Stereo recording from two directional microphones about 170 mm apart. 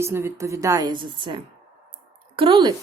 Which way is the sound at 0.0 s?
15° right (ahead or behind).